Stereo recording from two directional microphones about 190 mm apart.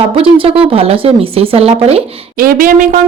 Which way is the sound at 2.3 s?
50° right (ahead or behind).